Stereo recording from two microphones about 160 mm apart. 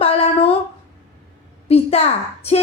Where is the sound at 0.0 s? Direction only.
35° left (ahead or behind).